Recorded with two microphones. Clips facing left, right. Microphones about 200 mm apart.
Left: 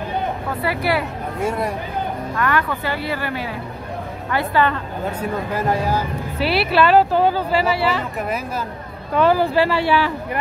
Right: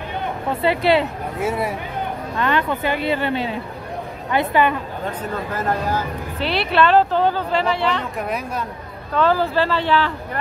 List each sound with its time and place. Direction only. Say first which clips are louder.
0.5 s speech: right 6 dB; 25° right (ahead or behind)
1.4 s speech: even; 5° right (ahead or behind)
2.3 s a woman's voice: right 1 dB; 20° right (ahead or behind)
5.0 s speech: left 5 dB; 10° left (ahead or behind)
9.1 s speech: left 2 dB; 15° left (ahead or behind)